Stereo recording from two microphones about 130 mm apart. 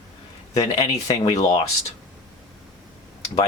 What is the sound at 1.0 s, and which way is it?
Speech, 25° left (ahead or behind).